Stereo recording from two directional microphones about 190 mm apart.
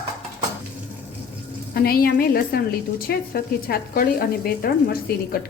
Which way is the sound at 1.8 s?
50° left (ahead or behind).